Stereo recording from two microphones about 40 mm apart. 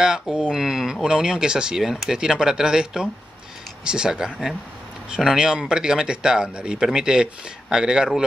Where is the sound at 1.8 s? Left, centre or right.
Centre; by 4.1 s right.